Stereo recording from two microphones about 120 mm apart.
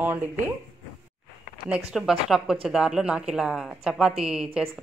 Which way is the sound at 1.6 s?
5° right (ahead or behind).